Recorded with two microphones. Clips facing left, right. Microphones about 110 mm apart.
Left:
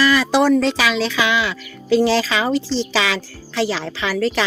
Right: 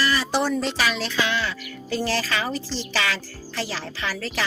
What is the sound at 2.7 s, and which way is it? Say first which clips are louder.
Speech: left 7 dB; 90° left.